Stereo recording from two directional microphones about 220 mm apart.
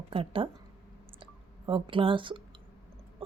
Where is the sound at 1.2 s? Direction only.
25° right (ahead or behind).